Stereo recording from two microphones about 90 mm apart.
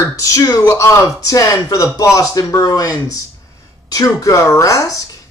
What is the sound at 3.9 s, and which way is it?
Speech, 35° left (ahead or behind).